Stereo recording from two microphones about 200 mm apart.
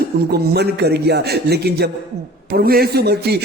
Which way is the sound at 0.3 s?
50° right (ahead or behind).